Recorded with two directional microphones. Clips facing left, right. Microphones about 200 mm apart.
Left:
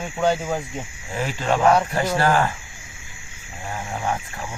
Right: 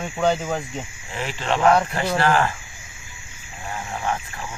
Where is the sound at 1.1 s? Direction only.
45° left (ahead or behind).